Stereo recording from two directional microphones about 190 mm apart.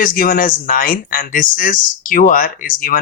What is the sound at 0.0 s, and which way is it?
Speech, 45° left (ahead or behind).